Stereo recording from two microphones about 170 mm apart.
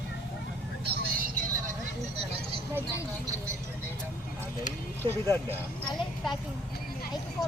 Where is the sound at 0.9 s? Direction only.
55° right (ahead or behind).